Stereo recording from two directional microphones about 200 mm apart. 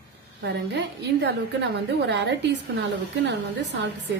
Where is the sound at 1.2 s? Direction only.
60° right (ahead or behind).